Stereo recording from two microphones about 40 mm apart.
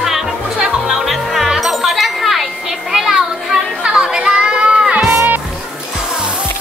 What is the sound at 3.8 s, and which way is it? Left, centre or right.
Music, right.